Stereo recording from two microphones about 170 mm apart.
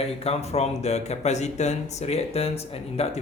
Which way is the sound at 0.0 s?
35° left (ahead or behind).